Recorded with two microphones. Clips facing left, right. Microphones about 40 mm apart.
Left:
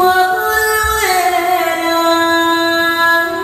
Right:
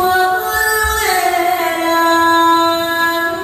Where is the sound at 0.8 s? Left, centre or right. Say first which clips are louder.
Left 2 dB; left.